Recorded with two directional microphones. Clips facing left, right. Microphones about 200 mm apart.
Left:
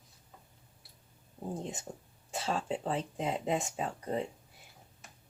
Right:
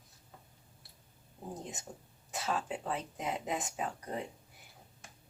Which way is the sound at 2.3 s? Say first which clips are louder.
Left 2 dB; 30° left (ahead or behind).